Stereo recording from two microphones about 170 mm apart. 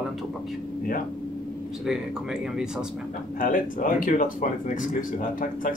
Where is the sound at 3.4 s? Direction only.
55° left (ahead or behind).